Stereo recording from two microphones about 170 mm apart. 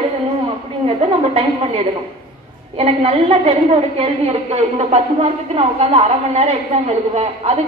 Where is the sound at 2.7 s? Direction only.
35° right (ahead or behind).